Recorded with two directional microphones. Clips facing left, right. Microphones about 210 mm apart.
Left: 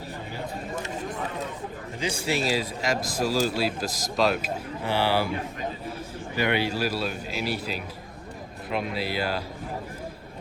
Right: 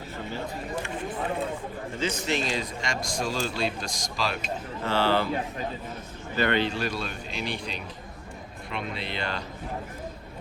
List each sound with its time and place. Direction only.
2.0 s speech: 10° left (ahead or behind)
4.8 s speech: 15° left (ahead or behind)
6.3 s speech: 10° left (ahead or behind)